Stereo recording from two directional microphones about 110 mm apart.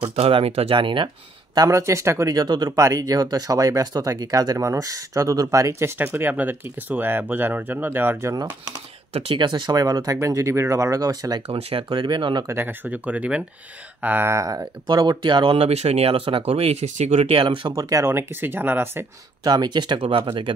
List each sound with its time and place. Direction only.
0.0 s speech: 60° right (ahead or behind); by 8.4 s 20° right (ahead or behind)
9.1 s speech: 55° right (ahead or behind); by 11.4 s 35° right (ahead or behind)
11.4 s speech: 65° right (ahead or behind)
11.9 s speech: 45° right (ahead or behind)
12.4 s speech: 20° right (ahead or behind); by 17.3 s 90° right
17.3 s speech: 50° right (ahead or behind); by 19.0 s 20° right (ahead or behind)
19.4 s speech: 40° right (ahead or behind)